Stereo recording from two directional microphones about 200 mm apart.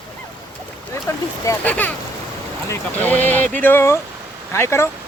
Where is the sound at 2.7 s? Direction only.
10° left (ahead or behind).